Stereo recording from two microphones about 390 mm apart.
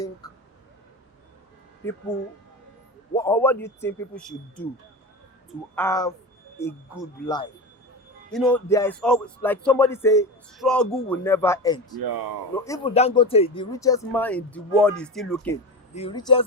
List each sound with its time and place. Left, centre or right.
1.8 s speech: centre
3.2 s speech: centre
11.9 s speech: right
12.5 s speech: centre
16.0 s speech: centre